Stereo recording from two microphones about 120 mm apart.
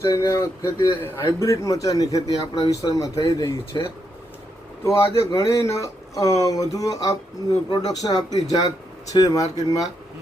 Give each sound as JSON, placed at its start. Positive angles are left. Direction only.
{"t": 0.0, "sound": "speech", "side_deg": 25}